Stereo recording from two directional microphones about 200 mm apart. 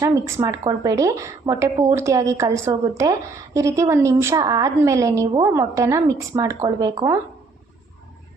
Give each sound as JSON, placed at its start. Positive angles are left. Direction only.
{"t": 0.0, "sound": "a woman's voice", "side_deg": -15}